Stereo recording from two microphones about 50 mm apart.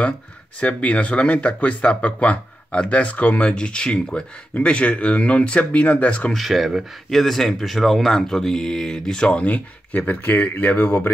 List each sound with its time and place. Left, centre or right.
0.6 s speech: left
6.3 s speech: centre
9.4 s speech: left